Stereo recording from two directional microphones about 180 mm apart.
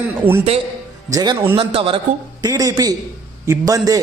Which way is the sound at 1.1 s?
20° right (ahead or behind).